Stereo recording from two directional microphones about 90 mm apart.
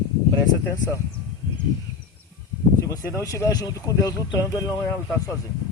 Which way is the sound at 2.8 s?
40° left (ahead or behind).